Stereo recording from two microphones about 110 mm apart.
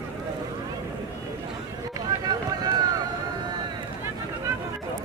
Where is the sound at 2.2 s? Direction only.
35° right (ahead or behind).